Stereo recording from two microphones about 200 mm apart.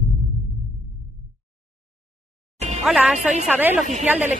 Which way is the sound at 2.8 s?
5° right (ahead or behind).